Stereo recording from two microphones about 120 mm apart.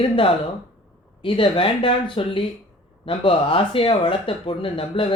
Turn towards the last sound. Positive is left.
turn(degrees=45)  # may be behind; listen again after turning